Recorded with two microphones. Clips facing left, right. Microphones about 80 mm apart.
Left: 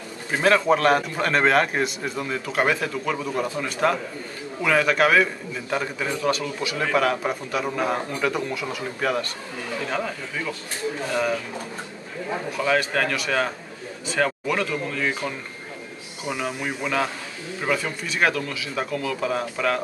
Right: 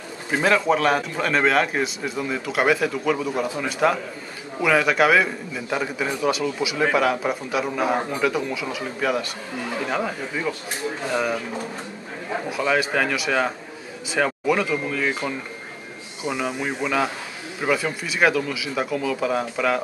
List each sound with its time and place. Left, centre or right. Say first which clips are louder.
0.3 s a man's voice: even; centre
9.8 s a man's voice: right 2 dB; centre
12.4 s a man's voice: right 1 dB; centre
16.4 s a man's voice: right 1 dB; centre